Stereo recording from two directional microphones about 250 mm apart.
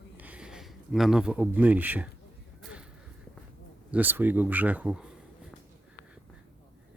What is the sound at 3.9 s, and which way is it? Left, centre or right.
Speech, centre.